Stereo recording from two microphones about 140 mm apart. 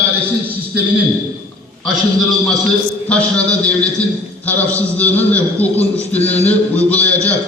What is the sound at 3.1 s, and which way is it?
A man's voice, 10° left (ahead or behind).